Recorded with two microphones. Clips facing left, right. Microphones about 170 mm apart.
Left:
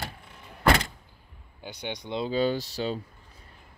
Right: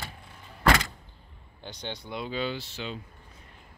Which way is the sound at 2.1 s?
35° left (ahead or behind).